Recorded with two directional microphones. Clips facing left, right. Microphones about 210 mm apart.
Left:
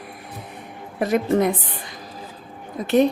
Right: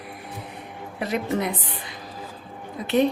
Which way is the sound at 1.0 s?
45° left (ahead or behind).